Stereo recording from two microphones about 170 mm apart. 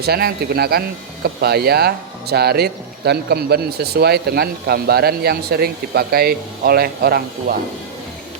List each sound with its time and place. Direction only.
0.0 s speech: 65° right (ahead or behind)